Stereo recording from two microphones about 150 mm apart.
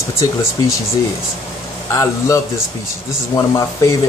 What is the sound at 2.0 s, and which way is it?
Speech, 20° left (ahead or behind).